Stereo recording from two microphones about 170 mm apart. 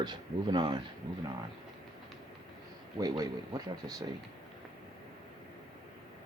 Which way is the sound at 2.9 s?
25° right (ahead or behind).